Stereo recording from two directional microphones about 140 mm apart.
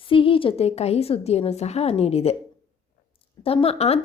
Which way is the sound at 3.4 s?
45° left (ahead or behind).